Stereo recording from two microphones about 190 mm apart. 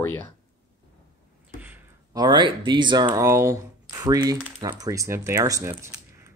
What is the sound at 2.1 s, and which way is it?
Speech, 25° right (ahead or behind).